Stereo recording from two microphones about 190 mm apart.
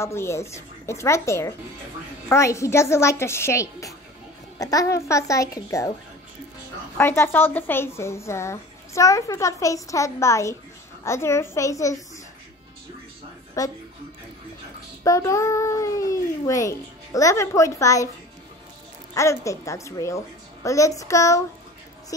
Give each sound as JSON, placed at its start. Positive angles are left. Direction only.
{"t": 0.0, "sound": "a woman's voice", "side_deg": 15}
{"t": 7.0, "sound": "a woman's voice", "side_deg": 10}
{"t": 13.6, "sound": "a woman's voice", "side_deg": 15}
{"t": 15.0, "sound": "a child's voice", "side_deg": 15}
{"t": 19.1, "sound": "a woman's voice", "side_deg": 15}